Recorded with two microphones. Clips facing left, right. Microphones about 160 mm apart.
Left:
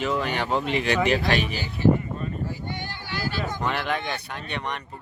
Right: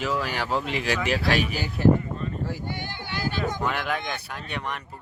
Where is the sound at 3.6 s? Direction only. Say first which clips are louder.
Left 1 dB; 5° right (ahead or behind).